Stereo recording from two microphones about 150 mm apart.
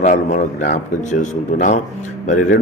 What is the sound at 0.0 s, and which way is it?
A man's voice, 55° left (ahead or behind).